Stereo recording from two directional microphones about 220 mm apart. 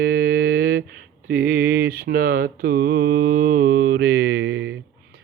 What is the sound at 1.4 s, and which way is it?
Mantra, 40° right (ahead or behind).